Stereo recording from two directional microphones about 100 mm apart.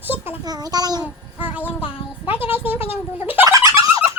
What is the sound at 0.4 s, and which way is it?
Speech, 40° right (ahead or behind).